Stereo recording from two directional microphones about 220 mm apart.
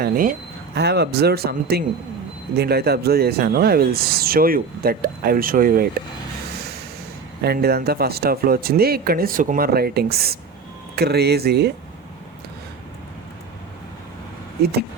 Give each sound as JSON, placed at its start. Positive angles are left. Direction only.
{"t": 0.0, "sound": "speech", "side_deg": -40}
{"t": 7.4, "sound": "speech", "side_deg": -45}